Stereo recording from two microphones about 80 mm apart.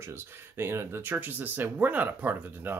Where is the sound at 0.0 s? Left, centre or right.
Right.